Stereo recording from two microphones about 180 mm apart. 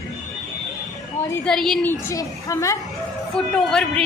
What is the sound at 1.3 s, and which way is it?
Speech, 5° left (ahead or behind).